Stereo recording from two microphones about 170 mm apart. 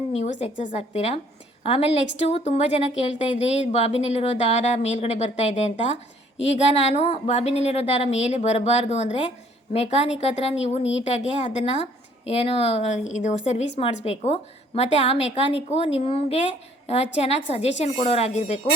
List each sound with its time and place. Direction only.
0.1 s a woman's voice: 40° left (ahead or behind)